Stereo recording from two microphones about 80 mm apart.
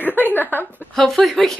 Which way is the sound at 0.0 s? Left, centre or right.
Left.